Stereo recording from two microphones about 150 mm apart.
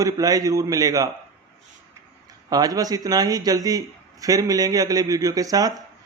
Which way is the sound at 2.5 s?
25° right (ahead or behind).